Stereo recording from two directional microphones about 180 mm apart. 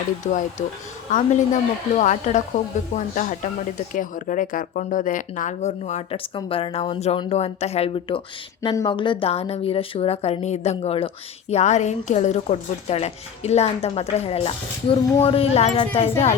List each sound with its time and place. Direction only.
0.2 s speech: 40° left (ahead or behind)